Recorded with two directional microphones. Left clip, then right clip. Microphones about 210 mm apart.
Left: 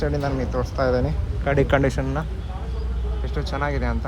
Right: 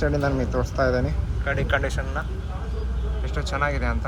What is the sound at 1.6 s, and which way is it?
Speech, 40° left (ahead or behind).